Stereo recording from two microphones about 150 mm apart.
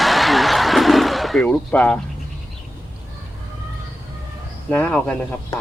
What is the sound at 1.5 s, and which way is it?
Speech, 10° left (ahead or behind).